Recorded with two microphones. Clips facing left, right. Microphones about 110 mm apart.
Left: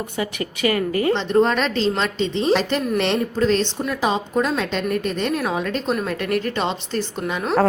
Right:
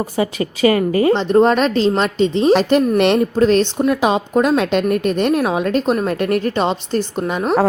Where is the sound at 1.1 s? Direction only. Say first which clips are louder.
Right 4 dB; 40° right (ahead or behind).